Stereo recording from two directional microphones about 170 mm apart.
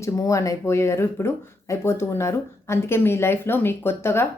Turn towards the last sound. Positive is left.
turn(degrees=15)  # may be behind; listen again after turning